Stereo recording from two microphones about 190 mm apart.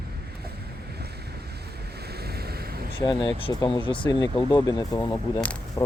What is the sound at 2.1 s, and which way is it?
Waves, 55° right (ahead or behind).